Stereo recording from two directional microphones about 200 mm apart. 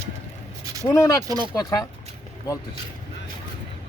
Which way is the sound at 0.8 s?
15° left (ahead or behind).